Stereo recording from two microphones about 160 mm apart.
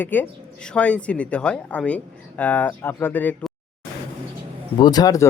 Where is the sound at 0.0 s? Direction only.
10° left (ahead or behind).